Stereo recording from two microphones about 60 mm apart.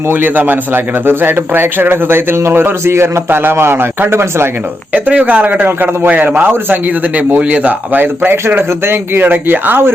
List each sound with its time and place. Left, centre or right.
0.1 s a man's voice: right
4.9 s a man's voice: right